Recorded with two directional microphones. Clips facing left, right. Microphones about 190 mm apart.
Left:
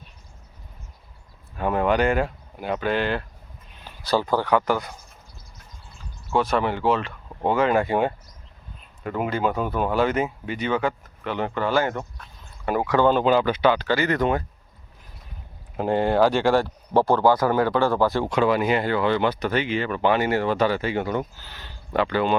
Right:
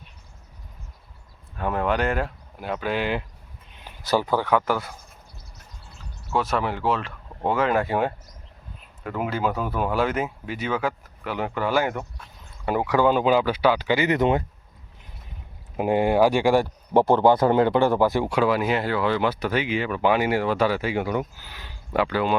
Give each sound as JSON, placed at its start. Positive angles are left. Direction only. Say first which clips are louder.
{"t": 1.5, "sound": "speech", "louder": "left 3 dB", "side_deg": 0}
{"t": 3.8, "sound": "a sound", "louder": "even", "side_deg": -15}
{"t": 4.5, "sound": "speech", "louder": "left 2 dB", "side_deg": -5}
{"t": 6.3, "sound": "speech", "louder": "left 2 dB", "side_deg": 0}
{"t": 15.8, "sound": "speech", "louder": "right 1 dB", "side_deg": -10}